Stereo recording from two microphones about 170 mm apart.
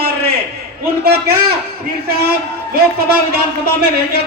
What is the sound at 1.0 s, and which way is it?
Speech, 65° right (ahead or behind).